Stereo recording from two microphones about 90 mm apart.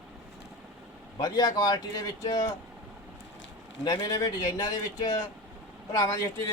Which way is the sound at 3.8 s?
45° left (ahead or behind).